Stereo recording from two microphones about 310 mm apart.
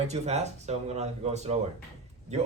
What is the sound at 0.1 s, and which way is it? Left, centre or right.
A man's voice, right.